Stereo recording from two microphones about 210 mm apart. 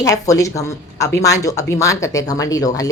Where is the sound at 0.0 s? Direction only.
15° left (ahead or behind).